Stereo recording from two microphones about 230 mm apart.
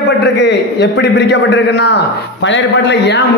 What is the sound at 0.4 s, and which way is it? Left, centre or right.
A man's voice, left.